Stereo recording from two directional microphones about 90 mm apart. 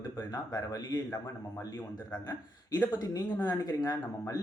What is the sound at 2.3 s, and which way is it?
Speech, 20° left (ahead or behind).